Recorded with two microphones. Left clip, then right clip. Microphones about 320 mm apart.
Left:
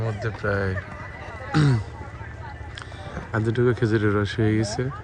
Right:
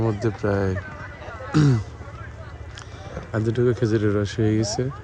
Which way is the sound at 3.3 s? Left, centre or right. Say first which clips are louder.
Right 1 dB; centre.